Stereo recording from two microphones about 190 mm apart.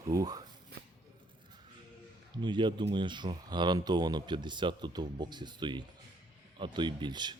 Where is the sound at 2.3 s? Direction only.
25° right (ahead or behind).